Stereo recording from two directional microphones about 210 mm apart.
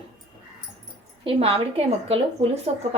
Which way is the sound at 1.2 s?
25° right (ahead or behind).